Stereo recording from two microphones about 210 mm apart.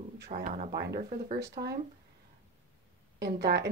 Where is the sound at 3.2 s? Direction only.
50° right (ahead or behind).